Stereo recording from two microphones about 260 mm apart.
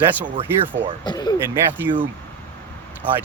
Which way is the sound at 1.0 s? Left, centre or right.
Centre.